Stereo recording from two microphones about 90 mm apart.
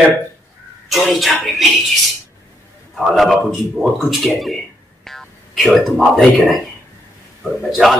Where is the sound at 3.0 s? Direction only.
Centre (ahead or behind).